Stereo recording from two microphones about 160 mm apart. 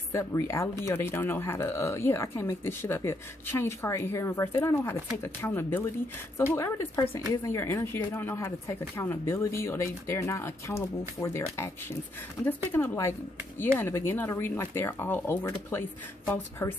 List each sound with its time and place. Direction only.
0.1 s a woman's voice: 20° left (ahead or behind)
12.7 s speech: 15° left (ahead or behind)